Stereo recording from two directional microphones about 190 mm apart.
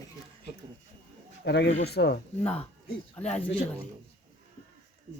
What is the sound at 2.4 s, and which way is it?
Speech, 35° left (ahead or behind).